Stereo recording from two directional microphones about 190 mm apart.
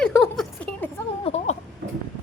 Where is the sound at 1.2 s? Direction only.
35° left (ahead or behind).